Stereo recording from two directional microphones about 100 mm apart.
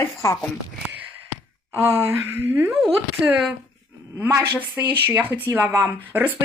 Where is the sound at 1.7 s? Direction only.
25° right (ahead or behind).